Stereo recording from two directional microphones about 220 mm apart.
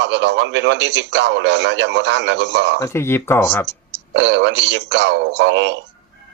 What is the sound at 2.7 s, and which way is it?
Speech, 10° left (ahead or behind).